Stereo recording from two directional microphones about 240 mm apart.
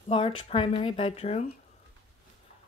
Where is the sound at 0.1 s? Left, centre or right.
Left.